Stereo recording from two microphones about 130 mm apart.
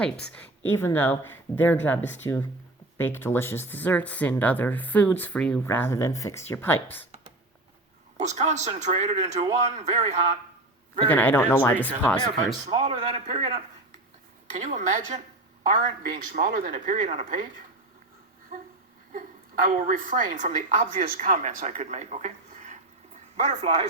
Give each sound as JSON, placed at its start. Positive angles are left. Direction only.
{"t": 0.0, "sound": "speech", "side_deg": 15}
{"t": 8.2, "sound": "speech", "side_deg": -60}
{"t": 11.1, "sound": "speech", "side_deg": 15}
{"t": 12.6, "sound": "a man's voice", "side_deg": -55}
{"t": 15.7, "sound": "a man's voice", "side_deg": -90}
{"t": 19.6, "sound": "speech", "side_deg": -90}